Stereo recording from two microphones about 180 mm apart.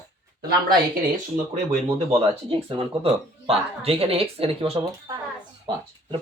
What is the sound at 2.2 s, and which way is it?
Speech, 30° right (ahead or behind).